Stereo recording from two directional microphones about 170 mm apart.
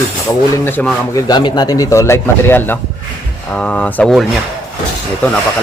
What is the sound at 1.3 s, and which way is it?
Speech, 25° left (ahead or behind).